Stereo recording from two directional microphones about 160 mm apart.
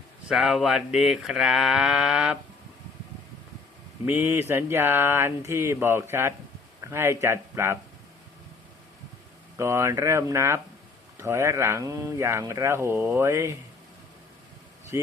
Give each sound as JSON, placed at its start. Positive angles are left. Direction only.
{"t": 0.3, "sound": "speech", "side_deg": -5}
{"t": 4.0, "sound": "speech", "side_deg": -10}
{"t": 9.6, "sound": "speech", "side_deg": -15}
{"t": 14.9, "sound": "speech", "side_deg": -15}